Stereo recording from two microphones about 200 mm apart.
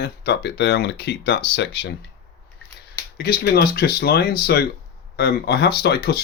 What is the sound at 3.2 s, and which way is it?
Speech, 50° left (ahead or behind).